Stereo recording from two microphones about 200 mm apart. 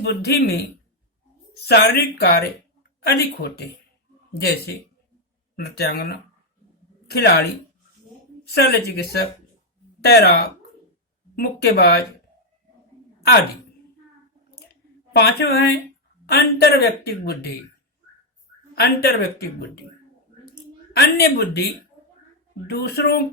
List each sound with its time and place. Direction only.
0.0 s a woman's voice: 55° left (ahead or behind)
8.5 s a woman's voice: 50° left (ahead or behind)
15.1 s a woman's voice: 50° left (ahead or behind)
18.7 s a woman's voice: 50° left (ahead or behind)
20.9 s a woman's voice: 55° left (ahead or behind)
22.6 s a woman's voice: 55° left (ahead or behind)